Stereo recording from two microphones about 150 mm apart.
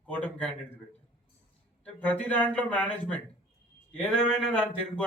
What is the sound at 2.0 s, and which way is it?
A man's voice, 10° left (ahead or behind).